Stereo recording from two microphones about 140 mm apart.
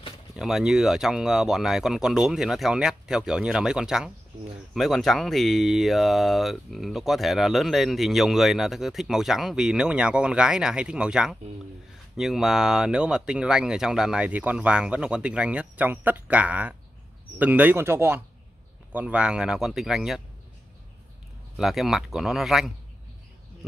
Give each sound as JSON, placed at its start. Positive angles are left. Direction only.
{"t": 0.4, "sound": "speech", "side_deg": -5}
{"t": 21.5, "sound": "speech", "side_deg": 0}